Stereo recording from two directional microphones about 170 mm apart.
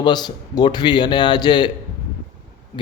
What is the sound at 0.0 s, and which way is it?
A man's voice, 25° left (ahead or behind).